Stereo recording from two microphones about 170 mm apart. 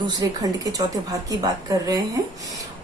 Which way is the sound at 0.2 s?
20° right (ahead or behind).